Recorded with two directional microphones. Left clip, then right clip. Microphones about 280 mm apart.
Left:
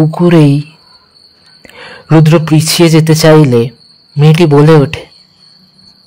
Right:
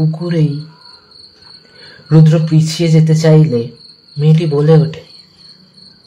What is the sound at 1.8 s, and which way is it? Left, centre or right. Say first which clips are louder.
Speech: left 5 dB; left.